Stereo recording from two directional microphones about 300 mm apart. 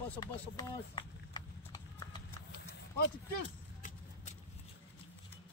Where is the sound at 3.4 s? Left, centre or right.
Left.